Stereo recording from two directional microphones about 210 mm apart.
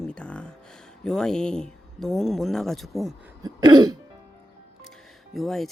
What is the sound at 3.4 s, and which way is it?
Cough, 20° right (ahead or behind).